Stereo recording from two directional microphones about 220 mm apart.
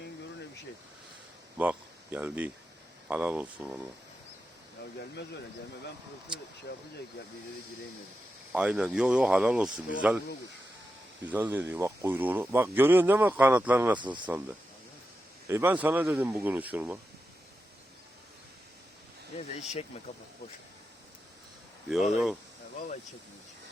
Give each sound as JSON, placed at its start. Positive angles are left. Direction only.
{"t": 1.5, "sound": "speech", "side_deg": -5}
{"t": 8.5, "sound": "speech", "side_deg": -5}
{"t": 11.3, "sound": "speech", "side_deg": -10}
{"t": 15.4, "sound": "speech", "side_deg": -10}
{"t": 19.3, "sound": "speech", "side_deg": 25}
{"t": 21.8, "sound": "speech", "side_deg": 0}